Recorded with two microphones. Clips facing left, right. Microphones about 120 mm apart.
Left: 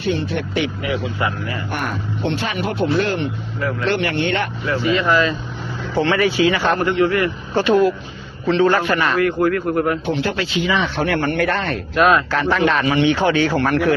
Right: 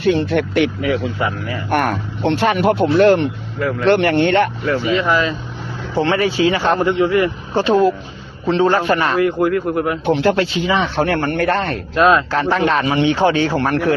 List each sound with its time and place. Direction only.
0.1 s speech: 80° right
1.7 s speech: 65° right (ahead or behind); by 4.4 s 45° right (ahead or behind)
4.8 s speech: 10° right (ahead or behind)
6.0 s a man's voice: 35° right (ahead or behind)
10.1 s speech: 55° right (ahead or behind)
10.7 s speech: 30° right (ahead or behind)